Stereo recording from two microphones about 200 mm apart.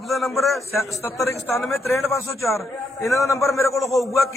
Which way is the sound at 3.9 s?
Centre (ahead or behind).